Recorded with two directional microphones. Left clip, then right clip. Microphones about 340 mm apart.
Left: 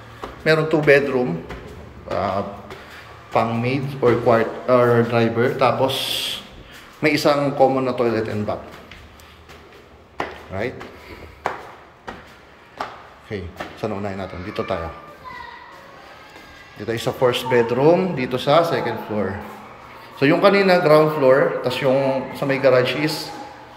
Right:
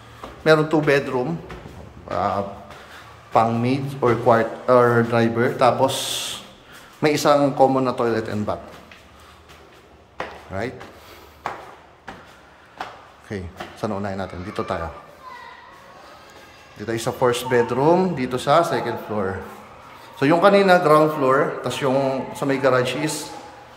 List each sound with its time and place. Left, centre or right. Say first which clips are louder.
0.4 s speech: right 1 dB; centre
3.3 s speech: right 2 dB; centre
10.5 s speech: left 2 dB; centre
13.3 s speech: left 2 dB; centre
16.8 s speech: left 1 dB; centre